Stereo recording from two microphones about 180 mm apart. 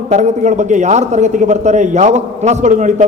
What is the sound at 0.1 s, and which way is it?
A man's voice, 40° right (ahead or behind).